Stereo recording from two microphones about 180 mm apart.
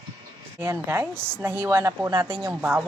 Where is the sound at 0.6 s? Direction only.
10° right (ahead or behind).